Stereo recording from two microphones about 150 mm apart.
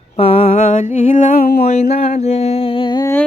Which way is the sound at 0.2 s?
40° left (ahead or behind).